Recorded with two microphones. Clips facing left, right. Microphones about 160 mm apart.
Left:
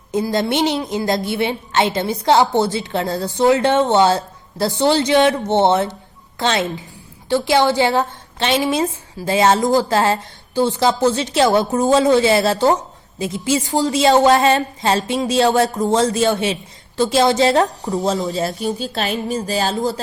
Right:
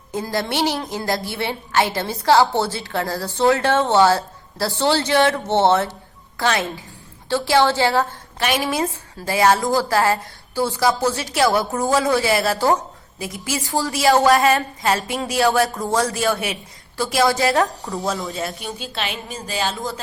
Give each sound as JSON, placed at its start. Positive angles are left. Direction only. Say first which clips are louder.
{"t": 0.1, "sound": "a woman's voice", "louder": "left 5 dB", "side_deg": 20}
{"t": 18.3, "sound": "speech", "louder": "left 7 dB", "side_deg": 35}